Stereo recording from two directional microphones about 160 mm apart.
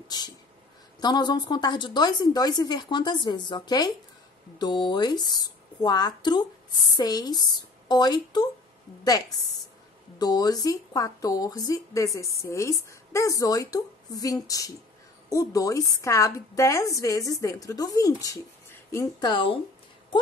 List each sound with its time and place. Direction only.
0.1 s a woman's voice: 25° left (ahead or behind)
10.1 s a woman's voice: 25° left (ahead or behind)
19.1 s speech: 30° left (ahead or behind)